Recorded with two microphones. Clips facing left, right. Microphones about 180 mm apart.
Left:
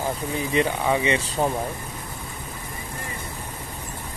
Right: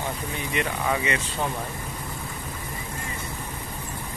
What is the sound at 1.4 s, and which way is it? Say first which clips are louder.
Speech: left 6 dB; 35° left (ahead or behind).